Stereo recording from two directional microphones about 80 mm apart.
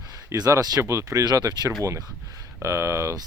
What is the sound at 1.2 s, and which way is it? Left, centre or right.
Speech, right.